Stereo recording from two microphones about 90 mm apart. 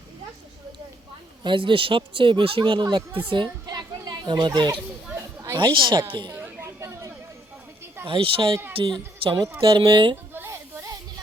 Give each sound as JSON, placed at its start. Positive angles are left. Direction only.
{"t": 1.5, "sound": "a child's voice", "side_deg": -70}
{"t": 5.1, "sound": "chatter", "side_deg": -30}
{"t": 5.7, "sound": "a woman's voice", "side_deg": -60}
{"t": 6.4, "sound": "a sound", "side_deg": -35}
{"t": 8.0, "sound": "speech", "side_deg": -75}
{"t": 9.9, "sound": "a woman's voice", "side_deg": -65}
{"t": 10.3, "sound": "children playing", "side_deg": -30}